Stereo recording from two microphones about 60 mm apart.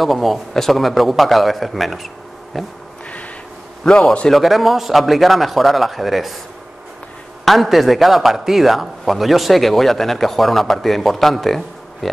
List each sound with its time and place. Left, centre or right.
0.0 s a man's voice: centre
3.8 s a man's voice: centre
4.3 s a man's voice: centre
7.4 s a man's voice: centre